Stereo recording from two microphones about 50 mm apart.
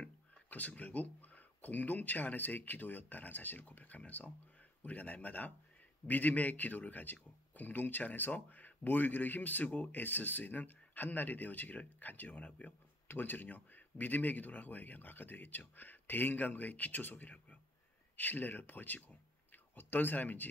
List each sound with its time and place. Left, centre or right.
0.5 s speech: left
13.1 s speech: left